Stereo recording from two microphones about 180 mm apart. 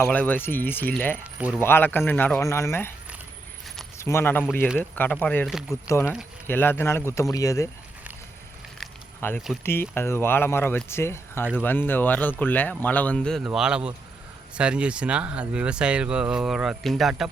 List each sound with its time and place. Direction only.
0.0 s speech: 10° left (ahead or behind)
1.2 s speech: 5° right (ahead or behind)
1.5 s speech: 10° left (ahead or behind)
3.9 s speech: 15° left (ahead or behind)
5.5 s speech: 5° right (ahead or behind)
5.9 s speech: 15° left (ahead or behind)
9.2 s speech: 10° left (ahead or behind)